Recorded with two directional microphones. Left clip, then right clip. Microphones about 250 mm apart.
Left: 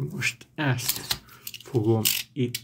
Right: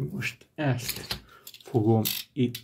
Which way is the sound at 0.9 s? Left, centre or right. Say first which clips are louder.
Left 5 dB; left.